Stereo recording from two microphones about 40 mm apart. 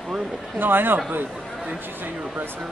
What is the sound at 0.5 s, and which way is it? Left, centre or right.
Speech, right.